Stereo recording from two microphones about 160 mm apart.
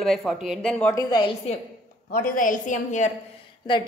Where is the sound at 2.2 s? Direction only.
60° left (ahead or behind).